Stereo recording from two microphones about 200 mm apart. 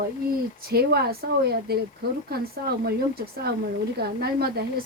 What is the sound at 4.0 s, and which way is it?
Speech, 50° right (ahead or behind).